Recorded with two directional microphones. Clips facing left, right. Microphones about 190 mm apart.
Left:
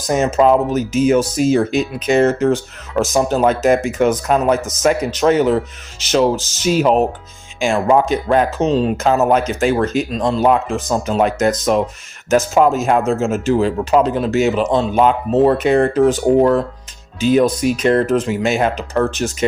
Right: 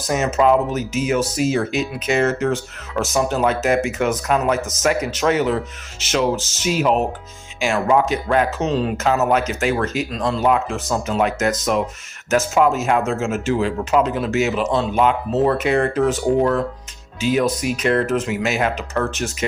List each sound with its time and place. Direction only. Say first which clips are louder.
0.1 s speech: left 3 dB; 35° left (ahead or behind)